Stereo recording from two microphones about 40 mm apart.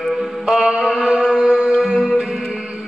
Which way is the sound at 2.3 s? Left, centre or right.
Centre.